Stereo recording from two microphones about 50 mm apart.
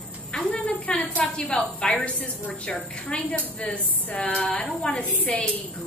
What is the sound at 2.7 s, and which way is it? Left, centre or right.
A woman's voice, left.